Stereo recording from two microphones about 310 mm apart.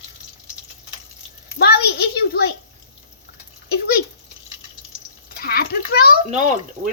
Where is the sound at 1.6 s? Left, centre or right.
Left.